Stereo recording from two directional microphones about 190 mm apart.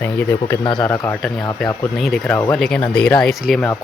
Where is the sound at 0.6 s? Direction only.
25° left (ahead or behind).